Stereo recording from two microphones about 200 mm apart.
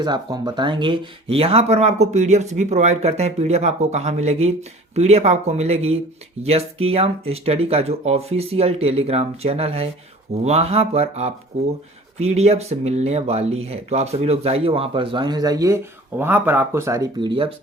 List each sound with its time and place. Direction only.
0.0 s speech: 20° right (ahead or behind)